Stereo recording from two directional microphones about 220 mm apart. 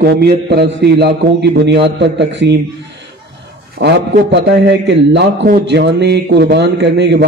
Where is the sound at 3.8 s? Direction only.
50° right (ahead or behind).